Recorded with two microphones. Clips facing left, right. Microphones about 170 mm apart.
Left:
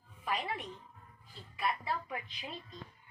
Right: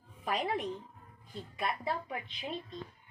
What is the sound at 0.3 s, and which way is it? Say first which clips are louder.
A woman's voice: right 4 dB; 40° right (ahead or behind).